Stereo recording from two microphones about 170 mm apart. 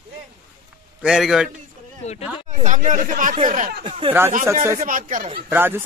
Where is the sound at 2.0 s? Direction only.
40° left (ahead or behind).